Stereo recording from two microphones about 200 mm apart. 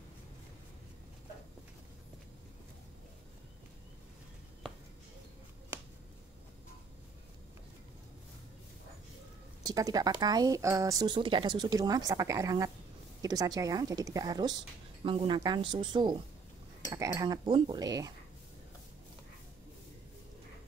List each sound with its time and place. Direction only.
9.6 s speech: 20° right (ahead or behind)